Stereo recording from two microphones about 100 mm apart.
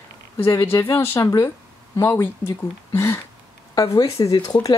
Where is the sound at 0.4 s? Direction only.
25° left (ahead or behind).